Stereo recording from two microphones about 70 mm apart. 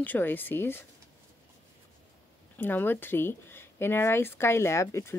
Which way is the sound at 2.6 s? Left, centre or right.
Left.